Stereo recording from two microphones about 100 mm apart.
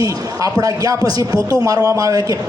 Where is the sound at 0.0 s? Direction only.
35° right (ahead or behind).